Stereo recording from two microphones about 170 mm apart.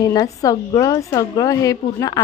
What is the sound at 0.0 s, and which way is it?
A woman's voice, 20° left (ahead or behind).